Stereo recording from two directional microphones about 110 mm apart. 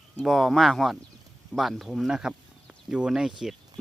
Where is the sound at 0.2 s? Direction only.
Centre (ahead or behind).